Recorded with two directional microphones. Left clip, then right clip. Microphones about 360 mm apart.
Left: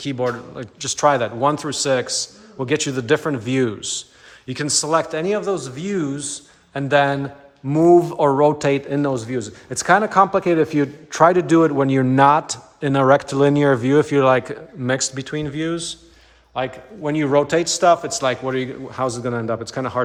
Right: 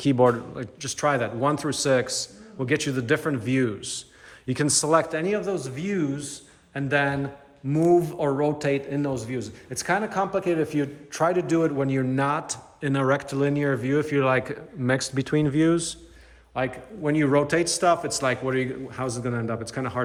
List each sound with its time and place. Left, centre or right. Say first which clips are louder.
0.0 s a man's voice: right 3 dB; centre
4.4 s speech: left 2 dB; centre